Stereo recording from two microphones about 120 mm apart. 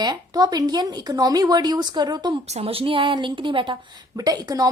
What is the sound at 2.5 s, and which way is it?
A woman's voice, 55° right (ahead or behind).